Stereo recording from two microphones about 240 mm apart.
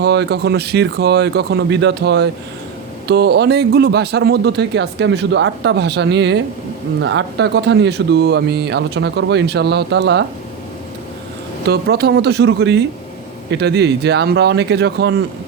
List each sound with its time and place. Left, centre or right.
0.0 s speech: right
11.6 s speech: right